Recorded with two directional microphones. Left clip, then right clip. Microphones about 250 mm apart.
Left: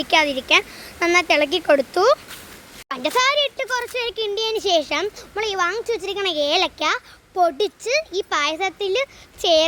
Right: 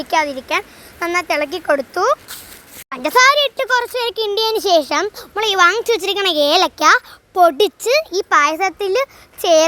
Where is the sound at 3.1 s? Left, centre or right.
Right.